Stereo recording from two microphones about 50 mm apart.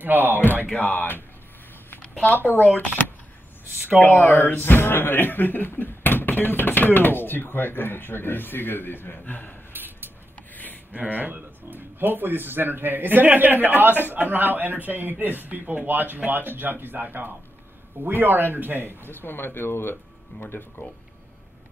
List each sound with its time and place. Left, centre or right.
0.0 s speech: right
0.7 s speech: left
2.0 s a sound: left
2.3 s speech: left
4.0 s speech: left
9.7 s a sound: right
10.5 s a sound: left
10.9 s speech: right
19.0 s speech: left